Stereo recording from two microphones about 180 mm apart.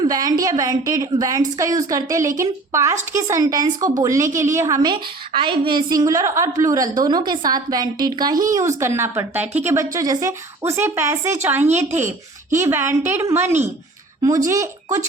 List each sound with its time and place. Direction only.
0.0 s a woman's voice: 20° right (ahead or behind)